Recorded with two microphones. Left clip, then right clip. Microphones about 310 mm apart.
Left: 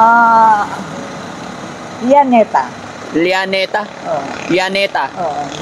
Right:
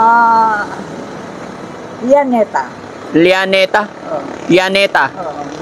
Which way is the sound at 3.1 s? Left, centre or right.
Centre.